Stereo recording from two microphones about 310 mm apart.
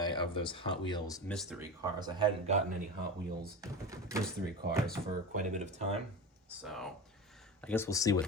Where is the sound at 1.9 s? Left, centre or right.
Centre.